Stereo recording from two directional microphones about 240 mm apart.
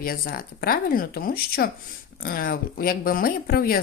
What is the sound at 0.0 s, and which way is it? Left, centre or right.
Speech, left.